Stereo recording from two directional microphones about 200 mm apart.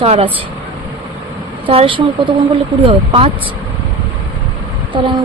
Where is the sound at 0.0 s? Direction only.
30° right (ahead or behind).